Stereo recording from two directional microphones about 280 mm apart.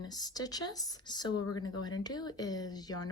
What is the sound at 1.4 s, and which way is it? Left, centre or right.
Speech, left.